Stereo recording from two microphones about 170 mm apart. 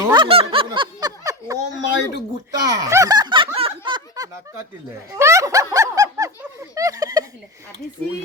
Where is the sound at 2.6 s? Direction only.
20° right (ahead or behind).